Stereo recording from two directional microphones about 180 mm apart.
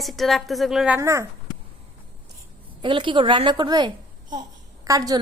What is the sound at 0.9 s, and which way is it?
Speech, 15° right (ahead or behind).